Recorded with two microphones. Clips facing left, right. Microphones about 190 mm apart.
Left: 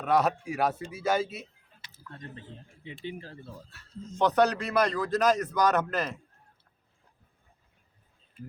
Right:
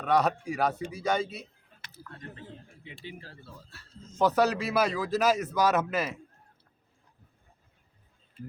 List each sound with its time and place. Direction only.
0.0 s a man's voice: centre (ahead or behind)
3.0 s speech: 20° left (ahead or behind)
4.1 s a man's voice: 5° right (ahead or behind)